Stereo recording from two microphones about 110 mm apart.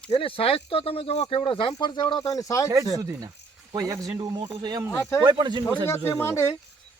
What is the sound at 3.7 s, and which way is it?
A man's voice, 35° right (ahead or behind).